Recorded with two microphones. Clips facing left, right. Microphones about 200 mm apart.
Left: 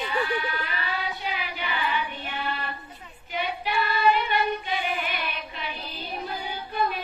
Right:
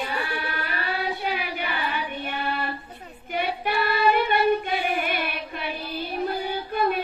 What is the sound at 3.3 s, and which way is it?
Female singing, 55° right (ahead or behind).